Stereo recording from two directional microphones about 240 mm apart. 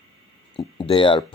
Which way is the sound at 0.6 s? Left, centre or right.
Centre.